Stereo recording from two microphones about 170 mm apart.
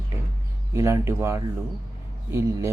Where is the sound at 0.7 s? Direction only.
15° right (ahead or behind).